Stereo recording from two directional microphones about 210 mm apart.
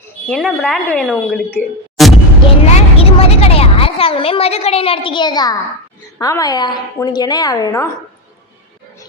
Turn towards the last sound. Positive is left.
turn(degrees=15)  # may be behind; listen again after turning